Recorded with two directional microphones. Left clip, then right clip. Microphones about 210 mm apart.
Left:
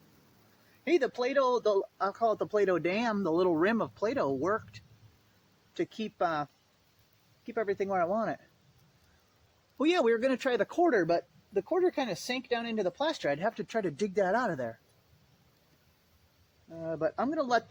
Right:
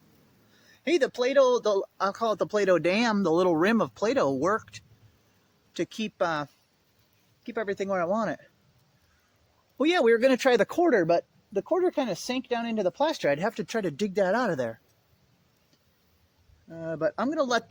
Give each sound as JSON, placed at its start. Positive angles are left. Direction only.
{"t": 0.9, "sound": "speech", "side_deg": -55}
{"t": 9.7, "sound": "speech", "side_deg": -35}
{"t": 16.7, "sound": "speech", "side_deg": -60}